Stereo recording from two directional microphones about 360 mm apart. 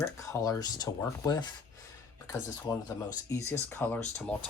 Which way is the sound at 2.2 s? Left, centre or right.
Centre.